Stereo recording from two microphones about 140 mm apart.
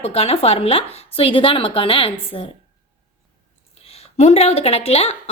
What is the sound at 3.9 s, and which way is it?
Speech, 50° left (ahead or behind).